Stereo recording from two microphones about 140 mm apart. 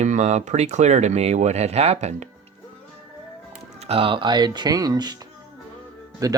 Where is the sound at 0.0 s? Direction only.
55° right (ahead or behind).